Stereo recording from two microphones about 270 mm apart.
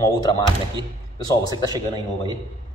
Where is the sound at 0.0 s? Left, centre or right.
Centre.